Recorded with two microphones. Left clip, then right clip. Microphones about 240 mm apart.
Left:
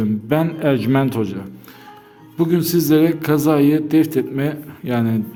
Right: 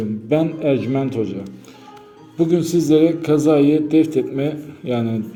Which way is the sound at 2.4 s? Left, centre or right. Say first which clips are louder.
Even; left.